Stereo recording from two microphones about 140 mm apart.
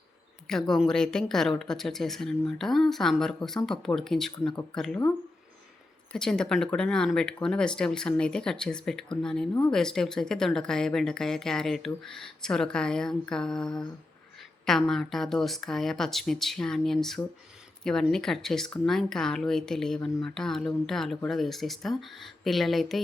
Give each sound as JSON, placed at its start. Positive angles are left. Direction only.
{"t": 0.4, "sound": "speech", "side_deg": 5}
{"t": 6.1, "sound": "speech", "side_deg": 5}